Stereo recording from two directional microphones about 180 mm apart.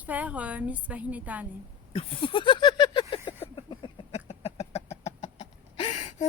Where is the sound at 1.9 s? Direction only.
30° left (ahead or behind).